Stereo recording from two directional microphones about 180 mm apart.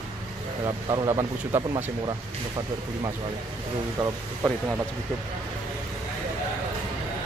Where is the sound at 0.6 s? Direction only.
20° right (ahead or behind).